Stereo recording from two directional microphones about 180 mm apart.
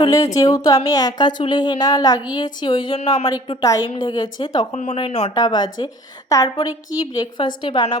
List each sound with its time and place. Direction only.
0.0 s a woman's voice: 20° left (ahead or behind)
4.7 s a woman's voice: 40° left (ahead or behind)